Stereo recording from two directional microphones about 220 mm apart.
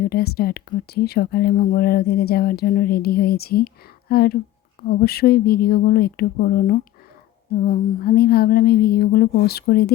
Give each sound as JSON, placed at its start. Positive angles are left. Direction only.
{"t": 0.0, "sound": "speech", "side_deg": 45}